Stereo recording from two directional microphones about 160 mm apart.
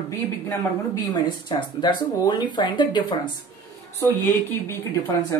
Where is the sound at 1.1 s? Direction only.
30° left (ahead or behind).